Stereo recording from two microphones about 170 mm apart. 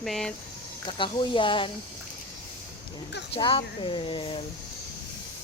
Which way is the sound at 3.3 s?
30° left (ahead or behind).